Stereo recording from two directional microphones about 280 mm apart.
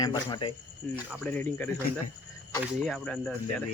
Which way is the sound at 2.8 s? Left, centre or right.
Centre.